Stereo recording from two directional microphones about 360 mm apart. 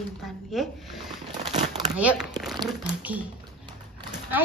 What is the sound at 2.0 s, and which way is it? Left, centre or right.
Speech, centre.